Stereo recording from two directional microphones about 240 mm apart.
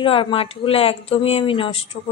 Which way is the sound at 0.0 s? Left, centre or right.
Left.